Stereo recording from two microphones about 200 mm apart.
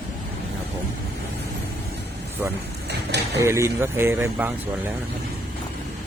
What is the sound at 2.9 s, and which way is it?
Mechanisms, 55° right (ahead or behind).